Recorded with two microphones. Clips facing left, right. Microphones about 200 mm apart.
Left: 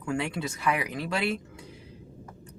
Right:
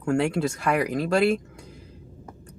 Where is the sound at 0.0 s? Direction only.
45° right (ahead or behind).